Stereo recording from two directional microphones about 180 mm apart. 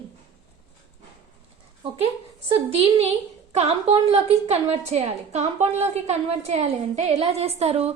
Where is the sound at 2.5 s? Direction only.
30° right (ahead or behind).